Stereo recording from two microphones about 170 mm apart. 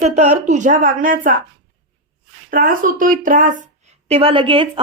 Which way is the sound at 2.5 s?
55° right (ahead or behind).